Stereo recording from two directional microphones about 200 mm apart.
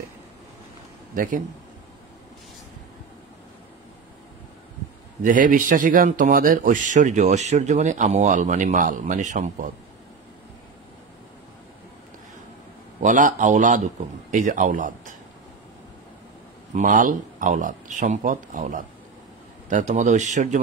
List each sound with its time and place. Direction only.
1.1 s speech: 40° right (ahead or behind)
5.2 s a man's voice: 45° right (ahead or behind)
13.0 s a man's voice: 40° right (ahead or behind)
16.7 s a man's voice: 40° right (ahead or behind)